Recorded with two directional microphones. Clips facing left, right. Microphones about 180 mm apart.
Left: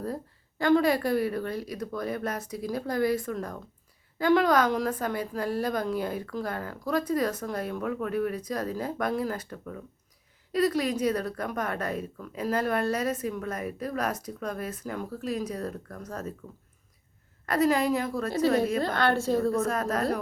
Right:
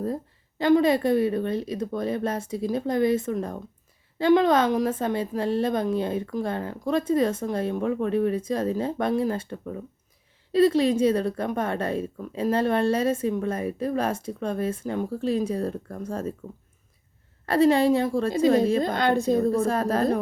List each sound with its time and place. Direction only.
0.6 s a woman's voice: 20° right (ahead or behind)
17.4 s a woman's voice: 30° right (ahead or behind)
18.8 s a woman's voice: 15° right (ahead or behind)
19.5 s a woman's voice: 30° right (ahead or behind)